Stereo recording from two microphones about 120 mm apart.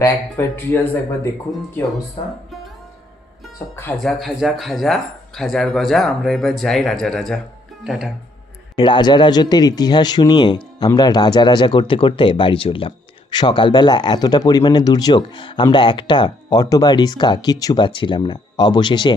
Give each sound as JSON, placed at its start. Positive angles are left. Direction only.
{"t": 0.0, "sound": "speech", "side_deg": 20}
{"t": 4.0, "sound": "speech", "side_deg": 0}
{"t": 8.7, "sound": "speech", "side_deg": 40}